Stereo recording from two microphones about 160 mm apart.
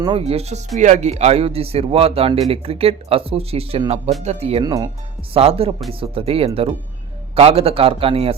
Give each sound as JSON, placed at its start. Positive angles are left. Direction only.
{"t": 0.0, "sound": "a man's voice", "side_deg": -35}
{"t": 4.6, "sound": "speech", "side_deg": -25}
{"t": 5.3, "sound": "a man's voice", "side_deg": -35}